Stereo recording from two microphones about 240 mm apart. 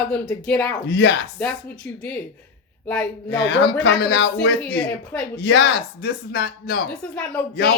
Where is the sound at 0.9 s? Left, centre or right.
Left.